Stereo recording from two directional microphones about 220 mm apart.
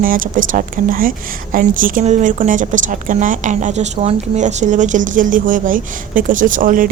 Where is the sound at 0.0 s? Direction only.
40° right (ahead or behind).